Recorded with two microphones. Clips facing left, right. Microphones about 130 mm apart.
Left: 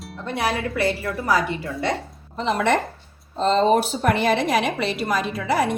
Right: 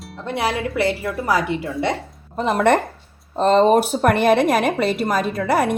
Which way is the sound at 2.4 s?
50° right (ahead or behind).